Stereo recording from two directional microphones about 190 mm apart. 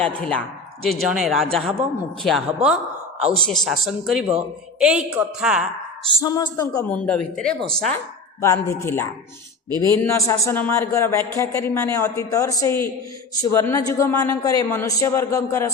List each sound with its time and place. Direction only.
0.0 s a man's voice: 5° left (ahead or behind)
6.1 s speech: 20° left (ahead or behind)
6.8 s a man's voice: 5° left (ahead or behind)
8.4 s a man's voice: 15° left (ahead or behind)